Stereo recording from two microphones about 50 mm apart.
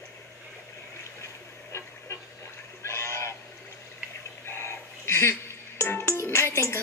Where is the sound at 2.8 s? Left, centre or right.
Left.